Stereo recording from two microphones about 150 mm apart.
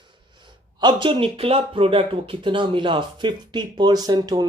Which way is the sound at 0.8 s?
30° right (ahead or behind).